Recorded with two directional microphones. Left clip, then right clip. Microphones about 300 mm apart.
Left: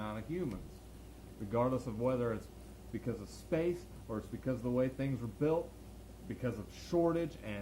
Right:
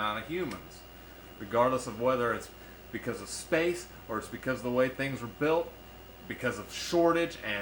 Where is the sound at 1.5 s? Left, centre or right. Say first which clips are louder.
Right 7 dB; centre.